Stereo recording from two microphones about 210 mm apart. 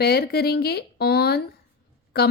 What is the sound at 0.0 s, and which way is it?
Speech, 50° left (ahead or behind).